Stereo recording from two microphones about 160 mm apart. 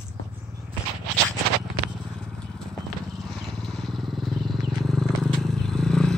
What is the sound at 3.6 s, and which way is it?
Vehicle, centre (ahead or behind).